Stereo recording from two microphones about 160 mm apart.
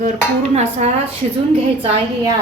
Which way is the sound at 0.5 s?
45° right (ahead or behind).